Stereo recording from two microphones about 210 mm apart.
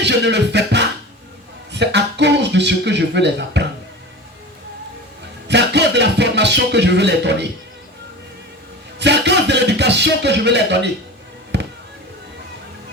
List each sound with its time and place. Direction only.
0.0 s music: 55° right (ahead or behind)
5.5 s music: 55° right (ahead or behind)
9.0 s music: 55° right (ahead or behind)